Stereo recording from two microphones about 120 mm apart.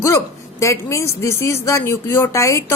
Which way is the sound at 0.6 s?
25° left (ahead or behind).